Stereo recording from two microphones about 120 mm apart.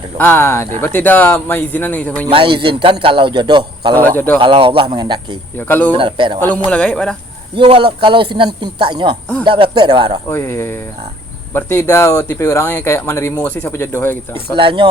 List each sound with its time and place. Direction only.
0.2 s speech: 15° left (ahead or behind)
2.3 s a man's voice: 45° right (ahead or behind)
3.9 s speech: 15° left (ahead or behind)
4.4 s a man's voice: 45° right (ahead or behind)
5.5 s speech: 15° left (ahead or behind)
5.9 s a man's voice: 45° right (ahead or behind)
6.7 s speech: 10° left (ahead or behind)
7.5 s a man's voice: 45° right (ahead or behind)
10.2 s speech: 20° left (ahead or behind)
14.5 s a man's voice: 45° right (ahead or behind)